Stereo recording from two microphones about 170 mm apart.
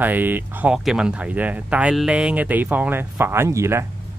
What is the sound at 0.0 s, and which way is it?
Speech, 10° right (ahead or behind).